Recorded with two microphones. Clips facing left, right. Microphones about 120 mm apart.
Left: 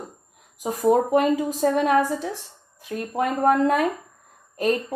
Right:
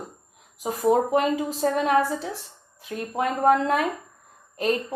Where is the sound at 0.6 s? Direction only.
35° left (ahead or behind).